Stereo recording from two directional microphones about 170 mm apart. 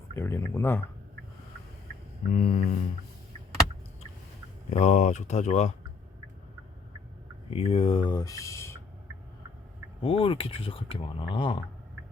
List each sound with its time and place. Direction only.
0.1 s speech: 15° left (ahead or behind)
2.3 s speech: 50° left (ahead or behind)
4.7 s speech: 40° left (ahead or behind)
7.5 s speech: 35° left (ahead or behind); by 8.8 s 15° left (ahead or behind)
10.0 s speech: 30° left (ahead or behind)